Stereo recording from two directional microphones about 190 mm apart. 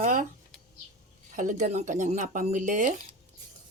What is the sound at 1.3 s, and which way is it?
Speech, 40° right (ahead or behind).